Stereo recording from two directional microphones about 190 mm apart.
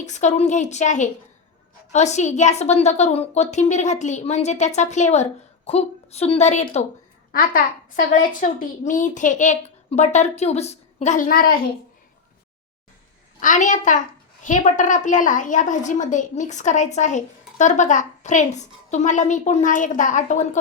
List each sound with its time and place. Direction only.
0.0 s a woman's voice: 40° left (ahead or behind)
13.4 s a woman's voice: 40° left (ahead or behind)